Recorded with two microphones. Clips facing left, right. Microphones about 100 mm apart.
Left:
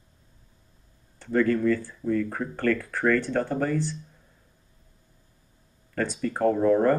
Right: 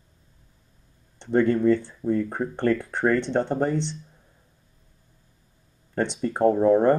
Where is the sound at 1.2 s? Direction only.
25° right (ahead or behind).